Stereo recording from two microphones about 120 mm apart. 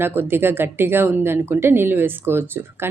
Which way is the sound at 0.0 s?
20° right (ahead or behind).